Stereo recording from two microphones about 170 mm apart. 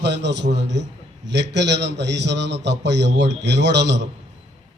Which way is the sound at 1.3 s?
90° right.